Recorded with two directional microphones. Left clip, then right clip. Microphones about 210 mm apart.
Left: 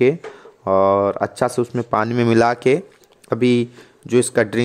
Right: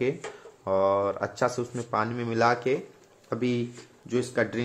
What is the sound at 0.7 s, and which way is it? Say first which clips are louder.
Speech: left 9 dB; 45° left (ahead or behind).